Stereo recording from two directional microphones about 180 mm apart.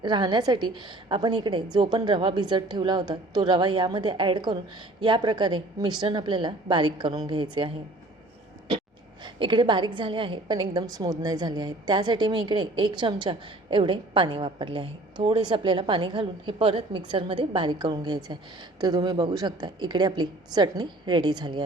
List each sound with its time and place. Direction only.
0.0 s a woman's voice: 25° right (ahead or behind)
9.2 s a woman's voice: 25° right (ahead or behind)